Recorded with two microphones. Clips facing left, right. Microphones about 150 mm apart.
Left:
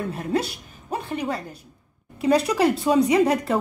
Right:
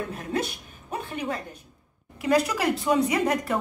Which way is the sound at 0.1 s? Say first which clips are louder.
Left 4 dB; 35° left (ahead or behind).